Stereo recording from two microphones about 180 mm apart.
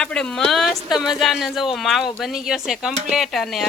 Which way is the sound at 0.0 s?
5° left (ahead or behind).